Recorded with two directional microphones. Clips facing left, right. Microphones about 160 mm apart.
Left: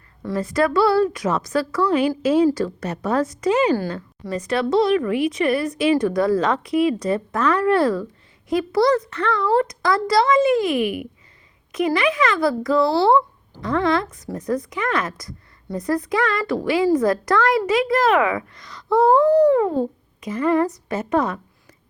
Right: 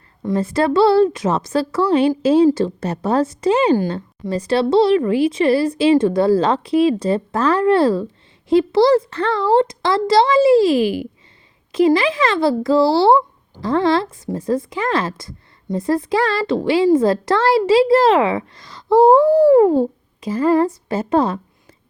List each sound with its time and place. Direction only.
0.3 s a woman's voice: 25° right (ahead or behind)